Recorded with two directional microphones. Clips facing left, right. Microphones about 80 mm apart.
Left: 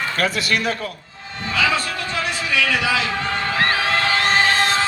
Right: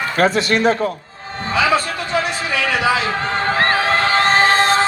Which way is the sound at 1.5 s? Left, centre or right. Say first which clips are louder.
Right 4 dB; right.